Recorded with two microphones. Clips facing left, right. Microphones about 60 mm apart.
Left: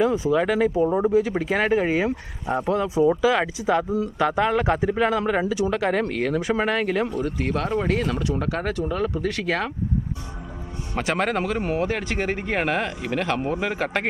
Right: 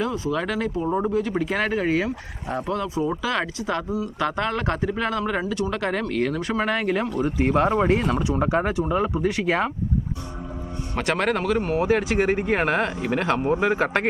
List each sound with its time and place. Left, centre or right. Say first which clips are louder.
0.0 s speech: left 5 dB; centre
7.2 s speech: right 4 dB; centre
10.9 s speech: even; centre
11.8 s speech: right 4 dB; centre